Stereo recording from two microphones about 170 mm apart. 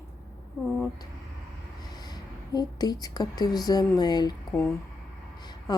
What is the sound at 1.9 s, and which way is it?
Speech, 25° left (ahead or behind).